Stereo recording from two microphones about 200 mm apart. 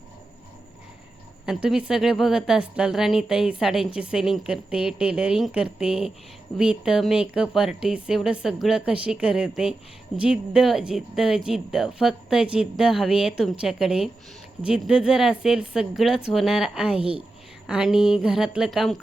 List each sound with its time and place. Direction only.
1.5 s speech: 5° right (ahead or behind)
17.0 s a woman's voice: 30° right (ahead or behind)
17.7 s speech: 5° right (ahead or behind)